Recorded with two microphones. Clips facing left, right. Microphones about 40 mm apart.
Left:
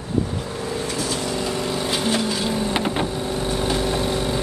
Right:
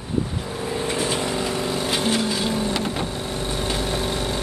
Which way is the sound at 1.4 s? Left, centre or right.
Centre.